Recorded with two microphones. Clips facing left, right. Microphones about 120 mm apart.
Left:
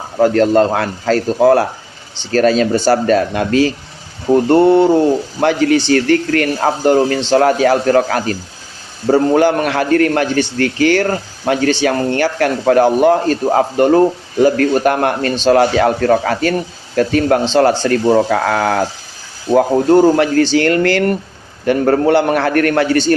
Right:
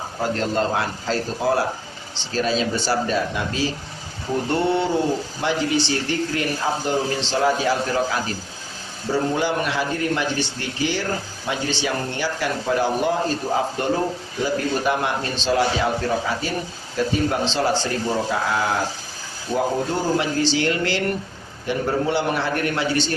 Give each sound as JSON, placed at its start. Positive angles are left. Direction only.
{"t": 0.2, "sound": "a man's voice", "side_deg": 55}
{"t": 4.4, "sound": "speech", "side_deg": 55}
{"t": 5.4, "sound": "a man's voice", "side_deg": 65}